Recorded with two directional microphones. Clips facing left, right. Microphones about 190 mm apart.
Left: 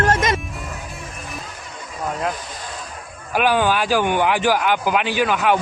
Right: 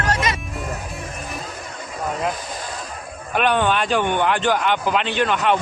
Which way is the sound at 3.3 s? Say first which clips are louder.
Left 1 dB; 5° left (ahead or behind).